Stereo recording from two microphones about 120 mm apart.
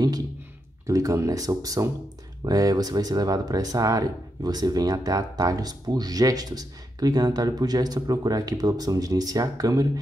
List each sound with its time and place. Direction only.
0.8 s speech: 25° right (ahead or behind)